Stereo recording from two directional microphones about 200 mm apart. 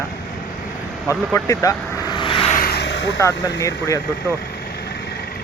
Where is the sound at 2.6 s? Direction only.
55° left (ahead or behind).